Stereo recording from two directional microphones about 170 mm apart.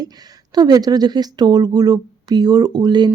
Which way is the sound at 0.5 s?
25° right (ahead or behind).